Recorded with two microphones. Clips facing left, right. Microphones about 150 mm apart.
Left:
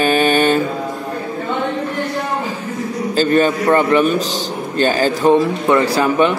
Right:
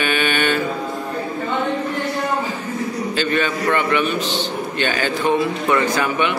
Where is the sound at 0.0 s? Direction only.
35° left (ahead or behind).